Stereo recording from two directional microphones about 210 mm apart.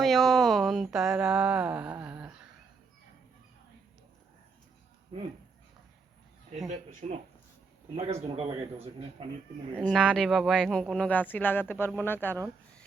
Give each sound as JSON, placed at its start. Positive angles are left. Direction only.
{"t": 0.0, "sound": "speech", "side_deg": 0}
{"t": 6.7, "sound": "speech", "side_deg": -35}
{"t": 9.8, "sound": "speech", "side_deg": 5}